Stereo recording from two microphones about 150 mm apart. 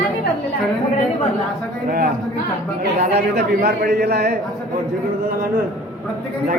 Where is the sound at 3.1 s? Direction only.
90° right.